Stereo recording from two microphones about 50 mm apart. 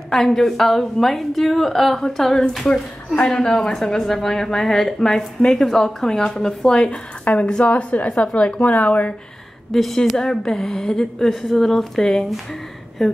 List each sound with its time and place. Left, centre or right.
0.1 s a woman's voice: centre; by 9.1 s left
9.7 s speech: centre
10.1 s a woman's voice: centre